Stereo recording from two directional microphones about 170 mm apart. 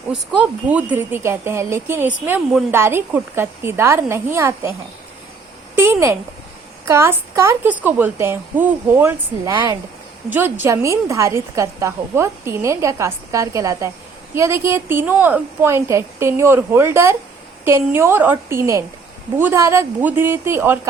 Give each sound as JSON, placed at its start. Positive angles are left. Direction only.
{"t": 0.1, "sound": "a woman's voice", "side_deg": -5}
{"t": 5.7, "sound": "a woman's voice", "side_deg": -15}